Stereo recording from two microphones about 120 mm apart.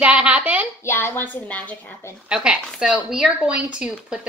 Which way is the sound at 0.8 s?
20° left (ahead or behind).